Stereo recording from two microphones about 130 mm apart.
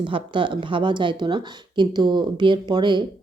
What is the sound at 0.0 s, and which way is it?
Speech, 40° right (ahead or behind).